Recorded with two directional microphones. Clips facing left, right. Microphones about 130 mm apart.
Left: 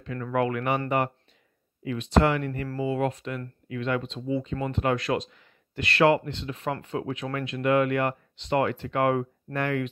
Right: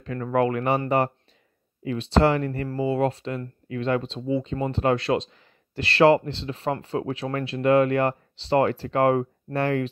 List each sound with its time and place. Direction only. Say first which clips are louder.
0.0 s speech: right 4 dB; 40° right (ahead or behind)